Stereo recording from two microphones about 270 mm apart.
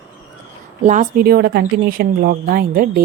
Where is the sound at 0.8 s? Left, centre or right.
Right.